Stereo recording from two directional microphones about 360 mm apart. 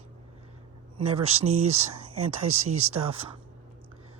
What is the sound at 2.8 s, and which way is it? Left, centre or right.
Speech, centre.